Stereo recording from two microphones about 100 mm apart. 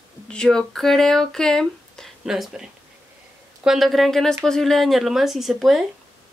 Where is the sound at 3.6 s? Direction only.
Centre (ahead or behind).